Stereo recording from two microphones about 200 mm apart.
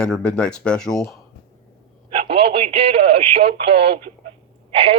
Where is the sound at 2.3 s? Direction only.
30° right (ahead or behind).